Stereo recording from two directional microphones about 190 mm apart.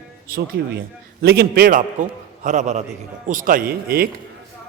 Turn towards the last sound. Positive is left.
turn(degrees=-50)  # may be behind; listen again after turning